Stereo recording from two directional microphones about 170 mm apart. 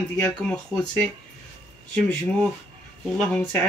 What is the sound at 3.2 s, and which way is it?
Speech, 5° left (ahead or behind).